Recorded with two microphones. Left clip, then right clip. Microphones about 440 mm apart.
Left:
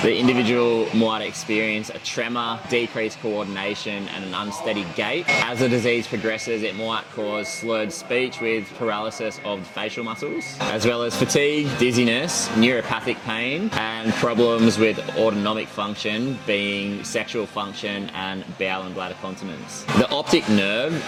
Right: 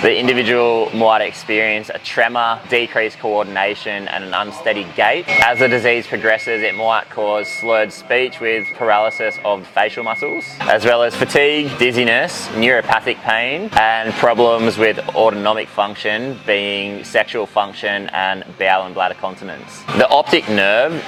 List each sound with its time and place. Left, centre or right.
0.1 s speech: right
12.5 s speech: right